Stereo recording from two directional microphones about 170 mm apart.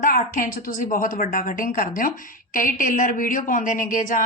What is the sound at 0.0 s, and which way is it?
A woman's voice, 55° left (ahead or behind).